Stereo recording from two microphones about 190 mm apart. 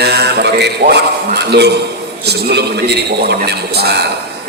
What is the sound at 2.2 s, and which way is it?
Speech, 60° right (ahead or behind).